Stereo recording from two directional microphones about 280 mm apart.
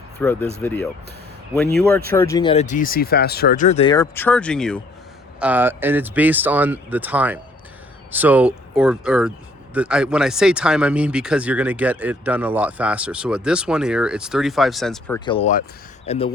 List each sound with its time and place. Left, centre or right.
0.2 s speech: centre
2.0 s speech: centre
15.2 s speech: centre